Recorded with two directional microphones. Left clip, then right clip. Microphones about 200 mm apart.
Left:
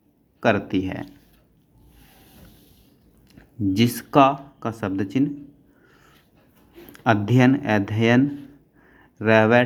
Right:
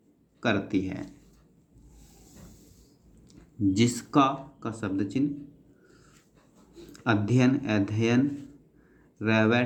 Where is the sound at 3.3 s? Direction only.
30° left (ahead or behind).